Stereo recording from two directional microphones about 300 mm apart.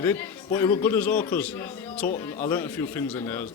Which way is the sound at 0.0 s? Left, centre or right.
Centre.